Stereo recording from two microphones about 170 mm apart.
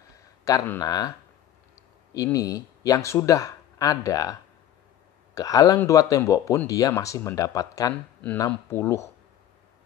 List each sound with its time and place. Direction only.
0.1 s speech: 20° left (ahead or behind)
2.1 s speech: 20° left (ahead or behind)